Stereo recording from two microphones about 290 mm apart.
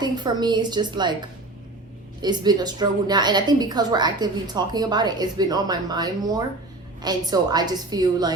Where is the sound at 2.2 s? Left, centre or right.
Centre.